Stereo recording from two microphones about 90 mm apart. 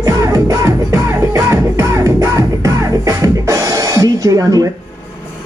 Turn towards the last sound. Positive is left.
turn(degrees=-40)  # may be behind; listen again after turning